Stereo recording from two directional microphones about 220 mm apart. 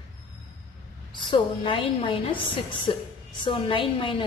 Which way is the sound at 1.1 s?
20° left (ahead or behind).